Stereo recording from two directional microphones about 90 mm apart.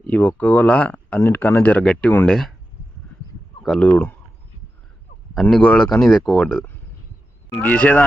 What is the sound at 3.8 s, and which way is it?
Speech, 20° left (ahead or behind).